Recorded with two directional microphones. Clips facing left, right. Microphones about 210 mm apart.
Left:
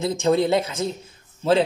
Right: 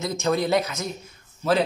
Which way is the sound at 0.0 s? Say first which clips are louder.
Left 4 dB; 30° left (ahead or behind).